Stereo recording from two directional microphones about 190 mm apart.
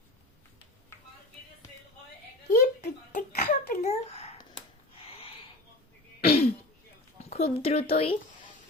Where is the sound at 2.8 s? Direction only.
50° left (ahead or behind); by 4.3 s 35° left (ahead or behind).